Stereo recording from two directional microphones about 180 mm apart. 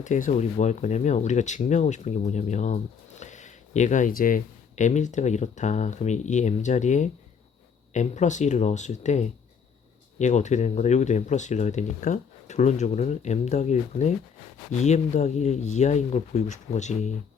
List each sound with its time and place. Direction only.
0.0 s speech: 45° left (ahead or behind)